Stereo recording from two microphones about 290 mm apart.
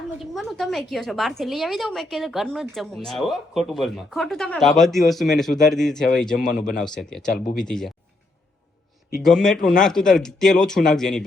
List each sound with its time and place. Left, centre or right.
0.2 s a woman's voice: centre
6.5 s speech: left
6.7 s a woman's voice: centre
9.1 s a woman's voice: centre